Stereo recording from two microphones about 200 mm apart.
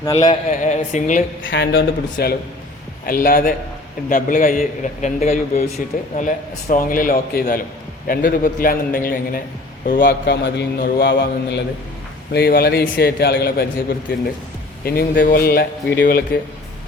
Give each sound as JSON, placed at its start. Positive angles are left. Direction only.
{"t": 0.0, "sound": "speech", "side_deg": 20}
{"t": 0.4, "sound": "a man's voice", "side_deg": 35}
{"t": 1.5, "sound": "a man's voice", "side_deg": 60}
{"t": 14.8, "sound": "a man's voice", "side_deg": 45}